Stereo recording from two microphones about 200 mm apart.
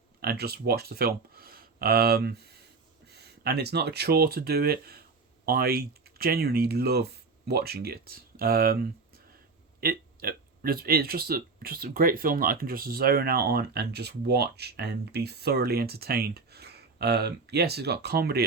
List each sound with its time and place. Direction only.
0.2 s speech: 50° right (ahead or behind)